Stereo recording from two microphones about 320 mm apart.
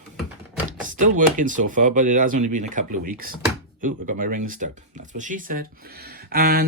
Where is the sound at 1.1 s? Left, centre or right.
Right.